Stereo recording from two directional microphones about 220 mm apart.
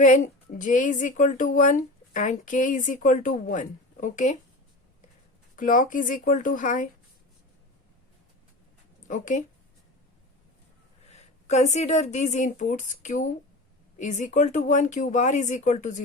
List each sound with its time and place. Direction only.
0.0 s speech: 35° left (ahead or behind)
5.5 s speech: 35° left (ahead or behind)
9.0 s speech: 35° left (ahead or behind)
11.1 s a woman's voice: 30° left (ahead or behind)